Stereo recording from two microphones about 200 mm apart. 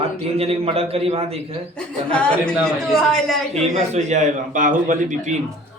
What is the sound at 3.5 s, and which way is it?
A man's voice, 35° right (ahead or behind).